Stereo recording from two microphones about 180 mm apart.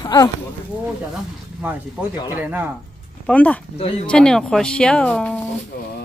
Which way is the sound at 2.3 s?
10° right (ahead or behind).